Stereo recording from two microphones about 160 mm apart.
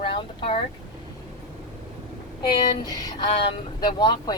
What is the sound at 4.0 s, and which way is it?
Speech, 30° left (ahead or behind).